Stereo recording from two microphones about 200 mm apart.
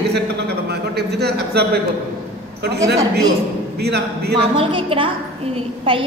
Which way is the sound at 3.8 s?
55° right (ahead or behind).